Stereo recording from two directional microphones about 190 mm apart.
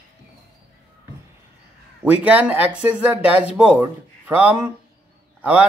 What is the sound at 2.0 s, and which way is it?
Speech, 5° right (ahead or behind).